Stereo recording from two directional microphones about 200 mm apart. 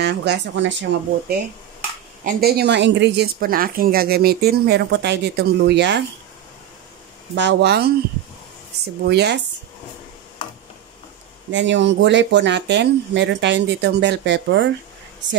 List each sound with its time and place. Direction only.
0.0 s speech: 55° right (ahead or behind)
2.2 s speech: 50° right (ahead or behind)
7.3 s speech: 60° right (ahead or behind)
9.0 s speech: 55° right (ahead or behind)
11.5 s speech: 65° right (ahead or behind)